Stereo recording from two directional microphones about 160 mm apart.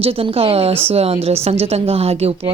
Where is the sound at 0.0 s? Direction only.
35° right (ahead or behind).